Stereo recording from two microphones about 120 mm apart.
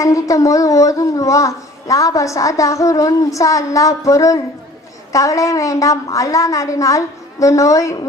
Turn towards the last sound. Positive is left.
turn(degrees=25)  # may be behind; listen again after turning